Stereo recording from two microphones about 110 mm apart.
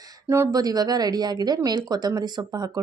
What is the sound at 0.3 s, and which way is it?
A woman's voice, 30° right (ahead or behind).